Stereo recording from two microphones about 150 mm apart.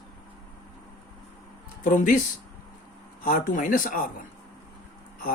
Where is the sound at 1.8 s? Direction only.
60° left (ahead or behind).